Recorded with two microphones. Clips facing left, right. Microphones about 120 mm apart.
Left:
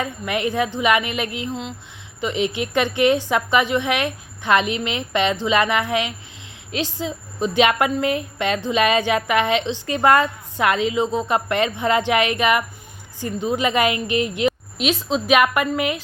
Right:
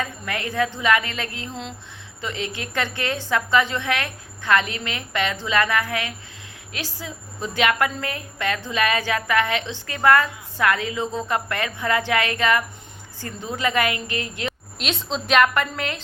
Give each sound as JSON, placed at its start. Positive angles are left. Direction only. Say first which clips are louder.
{"t": 0.0, "sound": "a woman's voice", "louder": "left 5 dB", "side_deg": 20}
{"t": 14.8, "sound": "a woman's voice", "louder": "left 2 dB", "side_deg": 5}